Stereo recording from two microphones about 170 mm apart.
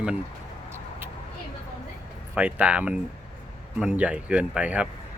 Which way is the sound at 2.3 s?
10° right (ahead or behind).